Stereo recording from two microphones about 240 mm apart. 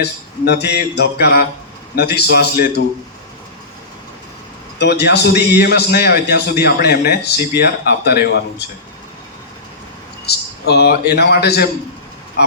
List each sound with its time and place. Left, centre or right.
0.0 s a man's voice: left
4.8 s a man's voice: left
10.2 s a man's voice: left